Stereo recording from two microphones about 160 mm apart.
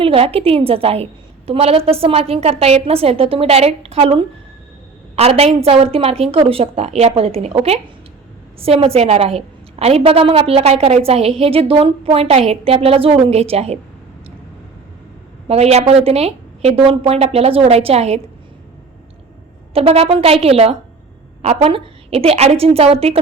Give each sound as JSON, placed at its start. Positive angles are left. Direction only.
{"t": 0.0, "sound": "a woman's voice", "side_deg": -35}
{"t": 15.4, "sound": "a woman's voice", "side_deg": -40}
{"t": 19.7, "sound": "a woman's voice", "side_deg": -40}